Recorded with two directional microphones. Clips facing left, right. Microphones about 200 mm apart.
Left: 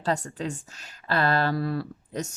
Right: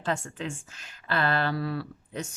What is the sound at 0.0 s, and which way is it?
Speech, 40° left (ahead or behind).